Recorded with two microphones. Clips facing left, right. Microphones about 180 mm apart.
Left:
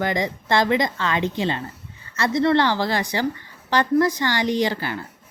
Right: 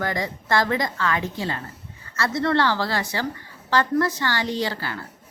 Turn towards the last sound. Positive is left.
turn(degrees=20)  # may be behind; listen again after turning